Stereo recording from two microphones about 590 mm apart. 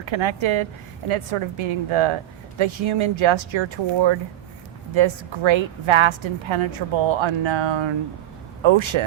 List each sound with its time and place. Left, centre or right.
0.0 s a woman's voice: right